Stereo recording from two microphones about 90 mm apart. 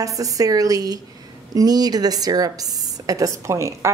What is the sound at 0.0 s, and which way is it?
A woman's voice, 40° right (ahead or behind).